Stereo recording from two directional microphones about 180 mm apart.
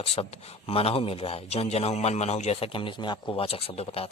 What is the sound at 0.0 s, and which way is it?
A man's voice, 35° left (ahead or behind).